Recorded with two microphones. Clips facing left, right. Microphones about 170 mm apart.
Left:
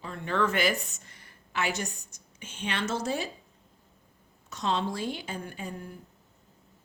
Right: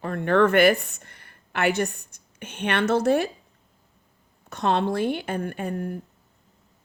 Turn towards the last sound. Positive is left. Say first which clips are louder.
# right 10 dB
turn(degrees=-60)  # may be behind; listen again after turning